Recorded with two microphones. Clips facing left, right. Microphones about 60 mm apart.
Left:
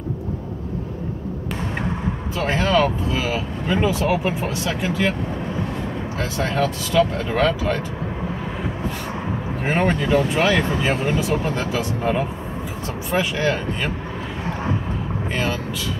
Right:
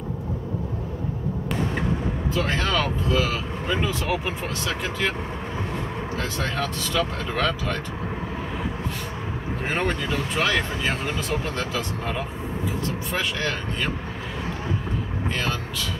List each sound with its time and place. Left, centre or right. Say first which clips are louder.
2.3 s speech: left 6 dB; centre
6.3 s speech: left 5 dB; centre
9.8 s speech: left 8 dB; left
13.1 s speech: left 8 dB; centre